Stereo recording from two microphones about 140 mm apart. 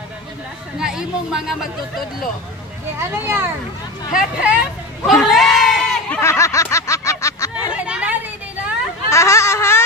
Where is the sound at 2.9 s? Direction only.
20° right (ahead or behind).